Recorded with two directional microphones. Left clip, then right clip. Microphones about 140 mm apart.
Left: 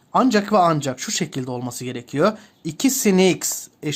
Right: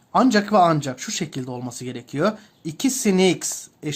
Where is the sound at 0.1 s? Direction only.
20° left (ahead or behind).